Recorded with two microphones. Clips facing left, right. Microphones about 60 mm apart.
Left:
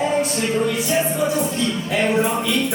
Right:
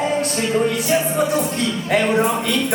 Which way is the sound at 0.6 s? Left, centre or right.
Right.